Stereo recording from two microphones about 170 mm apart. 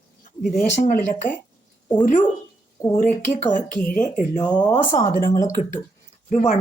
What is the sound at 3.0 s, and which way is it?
Speech, 45° left (ahead or behind).